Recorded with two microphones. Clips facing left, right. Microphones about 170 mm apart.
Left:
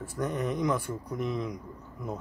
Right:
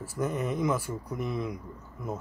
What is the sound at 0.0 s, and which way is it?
Speech, 5° right (ahead or behind).